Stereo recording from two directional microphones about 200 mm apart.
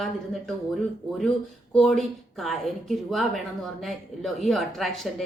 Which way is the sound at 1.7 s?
Centre (ahead or behind).